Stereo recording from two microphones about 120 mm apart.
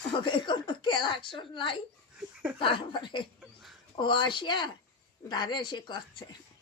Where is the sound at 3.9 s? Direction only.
40° left (ahead or behind).